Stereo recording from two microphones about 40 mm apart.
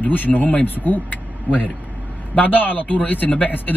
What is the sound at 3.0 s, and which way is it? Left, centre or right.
Speech, left.